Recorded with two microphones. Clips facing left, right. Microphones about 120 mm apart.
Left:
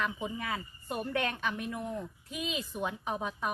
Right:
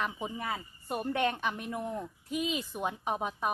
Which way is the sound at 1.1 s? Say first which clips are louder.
Right 2 dB; 30° right (ahead or behind).